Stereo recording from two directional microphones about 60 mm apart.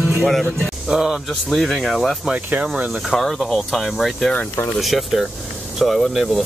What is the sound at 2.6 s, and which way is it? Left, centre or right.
Speech, centre.